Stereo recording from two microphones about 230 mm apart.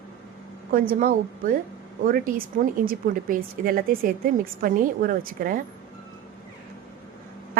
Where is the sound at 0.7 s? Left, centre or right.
Right.